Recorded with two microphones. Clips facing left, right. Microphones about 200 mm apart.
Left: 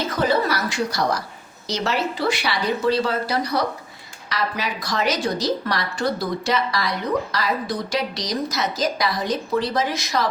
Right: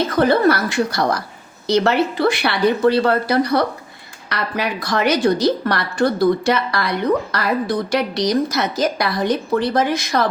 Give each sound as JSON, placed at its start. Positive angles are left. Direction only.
{"t": 0.2, "sound": "a woman's voice", "side_deg": -60}